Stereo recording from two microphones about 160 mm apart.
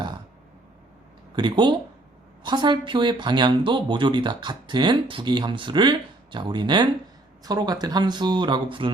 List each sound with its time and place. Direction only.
1.4 s speech: 30° right (ahead or behind)